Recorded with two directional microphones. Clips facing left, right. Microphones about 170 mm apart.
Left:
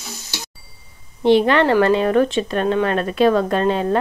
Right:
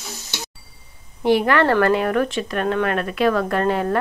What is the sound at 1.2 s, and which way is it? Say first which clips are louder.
A woman's voice: left 3 dB; 25° left (ahead or behind).